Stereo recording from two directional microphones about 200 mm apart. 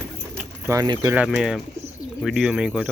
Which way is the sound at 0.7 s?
15° right (ahead or behind).